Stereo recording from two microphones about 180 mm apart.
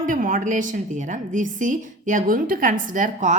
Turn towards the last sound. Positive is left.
turn(degrees=-45)  # may be behind; listen again after turning